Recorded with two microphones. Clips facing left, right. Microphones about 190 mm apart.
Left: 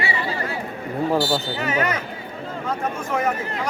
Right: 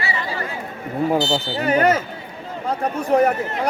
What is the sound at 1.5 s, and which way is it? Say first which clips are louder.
Speech: right 6 dB; 35° right (ahead or behind).